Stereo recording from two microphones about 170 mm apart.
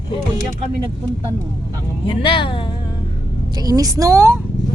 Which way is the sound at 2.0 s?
30° left (ahead or behind).